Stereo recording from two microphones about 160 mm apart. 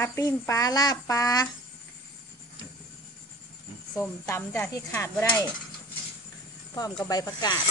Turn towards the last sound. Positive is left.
turn(degrees=25)  # may be behind; listen again after turning